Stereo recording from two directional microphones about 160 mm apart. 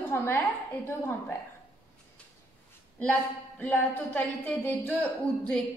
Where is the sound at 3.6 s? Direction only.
10° left (ahead or behind).